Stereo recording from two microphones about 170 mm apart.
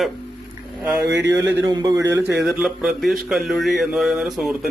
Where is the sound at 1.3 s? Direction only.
15° right (ahead or behind).